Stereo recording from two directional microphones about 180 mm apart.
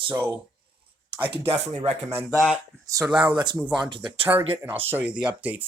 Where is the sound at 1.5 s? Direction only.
35° right (ahead or behind).